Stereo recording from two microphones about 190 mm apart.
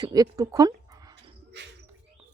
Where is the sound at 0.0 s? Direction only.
20° right (ahead or behind).